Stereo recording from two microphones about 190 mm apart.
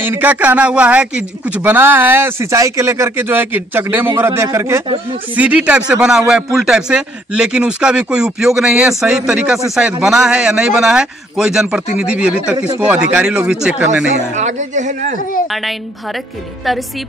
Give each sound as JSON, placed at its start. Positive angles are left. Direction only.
{"t": 0.0, "sound": "a man's voice", "side_deg": -10}
{"t": 14.3, "sound": "speech", "side_deg": -40}